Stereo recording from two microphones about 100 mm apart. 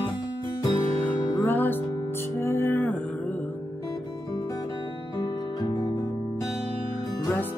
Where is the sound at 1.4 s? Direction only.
20° left (ahead or behind).